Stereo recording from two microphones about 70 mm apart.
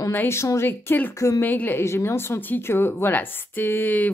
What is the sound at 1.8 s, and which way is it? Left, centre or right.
A woman's voice, left.